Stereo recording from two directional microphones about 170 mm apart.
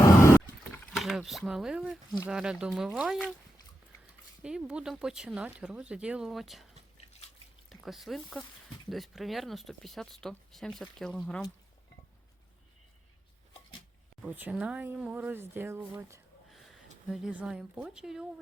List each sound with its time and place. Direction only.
0.0 s vehicle: 15° left (ahead or behind)
0.9 s speech: centre (ahead or behind)
4.4 s speech: 5° right (ahead or behind)
6.9 s drip: 40° left (ahead or behind)
7.7 s speech: centre (ahead or behind)
14.2 s speech: 10° right (ahead or behind)
17.1 s speech: 5° right (ahead or behind)